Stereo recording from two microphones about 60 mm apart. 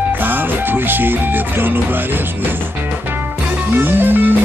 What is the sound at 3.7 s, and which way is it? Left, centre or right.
Music, right.